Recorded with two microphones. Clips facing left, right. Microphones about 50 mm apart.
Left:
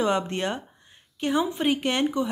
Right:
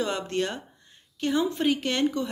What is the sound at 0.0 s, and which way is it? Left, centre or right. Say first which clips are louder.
Speech: left 3 dB; left.